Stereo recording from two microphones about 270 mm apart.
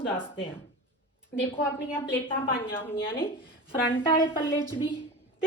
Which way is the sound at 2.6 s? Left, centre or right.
Centre.